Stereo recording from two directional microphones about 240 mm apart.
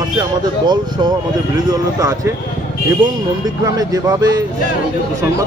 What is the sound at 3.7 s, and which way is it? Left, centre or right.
Speech, centre.